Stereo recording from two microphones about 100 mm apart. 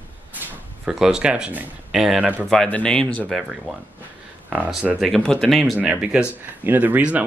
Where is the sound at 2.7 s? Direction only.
15° left (ahead or behind).